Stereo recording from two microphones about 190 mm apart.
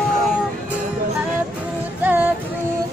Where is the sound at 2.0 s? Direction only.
10° right (ahead or behind).